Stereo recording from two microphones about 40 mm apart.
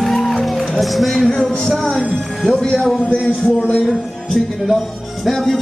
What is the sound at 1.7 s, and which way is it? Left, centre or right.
Speech, centre.